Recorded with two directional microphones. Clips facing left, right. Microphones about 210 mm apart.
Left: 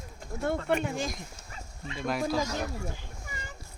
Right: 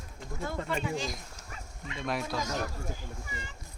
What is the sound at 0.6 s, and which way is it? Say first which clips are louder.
Speech: left 4 dB; 55° left (ahead or behind).